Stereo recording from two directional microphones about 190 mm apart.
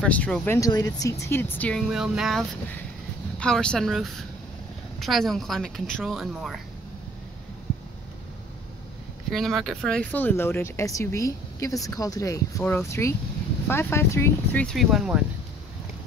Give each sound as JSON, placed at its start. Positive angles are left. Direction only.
{"t": 0.0, "sound": "speech", "side_deg": 5}
{"t": 0.6, "sound": "a woman's voice", "side_deg": 20}
{"t": 9.3, "sound": "speech", "side_deg": 0}